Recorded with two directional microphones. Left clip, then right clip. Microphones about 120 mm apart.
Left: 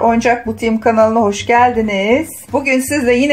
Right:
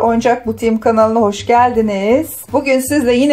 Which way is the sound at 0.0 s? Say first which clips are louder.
Even; 30° right (ahead or behind).